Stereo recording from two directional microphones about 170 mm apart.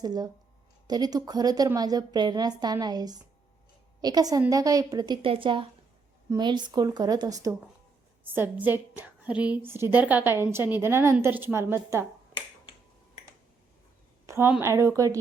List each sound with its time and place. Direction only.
0.0 s a woman's voice: 20° right (ahead or behind)
14.3 s a sound: 15° right (ahead or behind)
14.6 s a woman's voice: 15° right (ahead or behind)